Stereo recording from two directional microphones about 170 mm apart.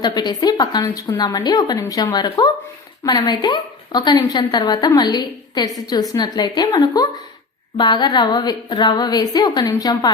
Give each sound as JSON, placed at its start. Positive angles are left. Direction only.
{"t": 0.0, "sound": "a woman's voice", "side_deg": 25}